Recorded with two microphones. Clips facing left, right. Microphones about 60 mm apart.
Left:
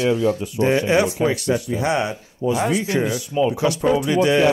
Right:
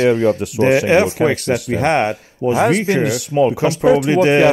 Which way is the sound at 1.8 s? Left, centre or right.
Right.